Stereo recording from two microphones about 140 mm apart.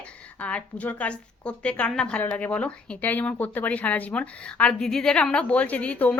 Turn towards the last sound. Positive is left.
turn(degrees=10)  # may be behind; listen again after turning